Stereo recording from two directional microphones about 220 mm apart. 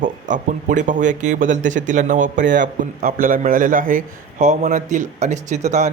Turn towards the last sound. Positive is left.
turn(degrees=-30)  # may be behind; listen again after turning